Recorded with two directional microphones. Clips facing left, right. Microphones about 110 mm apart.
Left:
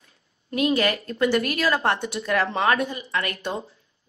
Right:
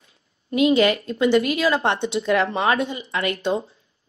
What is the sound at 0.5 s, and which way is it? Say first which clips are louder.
Speech: right 5 dB; 20° right (ahead or behind).